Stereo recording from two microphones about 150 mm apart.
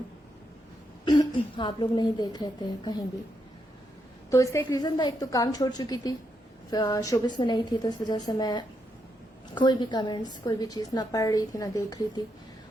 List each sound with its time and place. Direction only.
1.0 s a woman's voice: 30° left (ahead or behind)
4.3 s a woman's voice: 20° left (ahead or behind)